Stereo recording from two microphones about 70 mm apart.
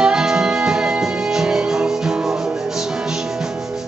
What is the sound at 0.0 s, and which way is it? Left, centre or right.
Music, centre.